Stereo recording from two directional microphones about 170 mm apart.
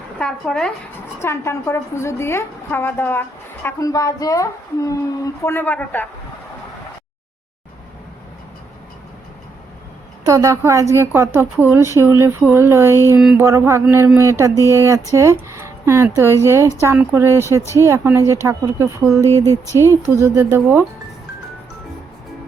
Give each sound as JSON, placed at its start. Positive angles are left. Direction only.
{"t": 0.2, "sound": "speech", "side_deg": 5}
{"t": 1.2, "sound": "a woman's voice", "side_deg": 15}
{"t": 10.2, "sound": "speech", "side_deg": -20}
{"t": 13.1, "sound": "speech", "side_deg": -5}
{"t": 13.4, "sound": "a woman's voice", "side_deg": -15}